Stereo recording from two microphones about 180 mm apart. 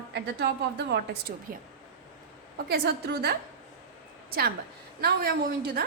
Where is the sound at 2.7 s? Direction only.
65° right (ahead or behind).